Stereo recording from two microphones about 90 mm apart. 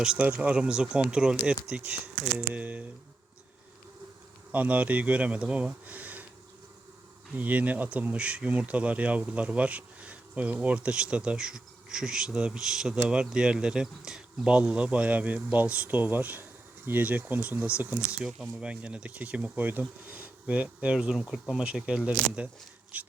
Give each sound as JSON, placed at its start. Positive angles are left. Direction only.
{"t": 0.0, "sound": "speech", "side_deg": -10}
{"t": 4.5, "sound": "speech", "side_deg": -15}
{"t": 7.3, "sound": "speech", "side_deg": -15}